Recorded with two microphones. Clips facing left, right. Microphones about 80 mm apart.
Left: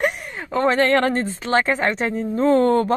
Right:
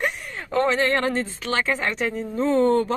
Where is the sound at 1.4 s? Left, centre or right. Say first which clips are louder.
Left 5 dB; left.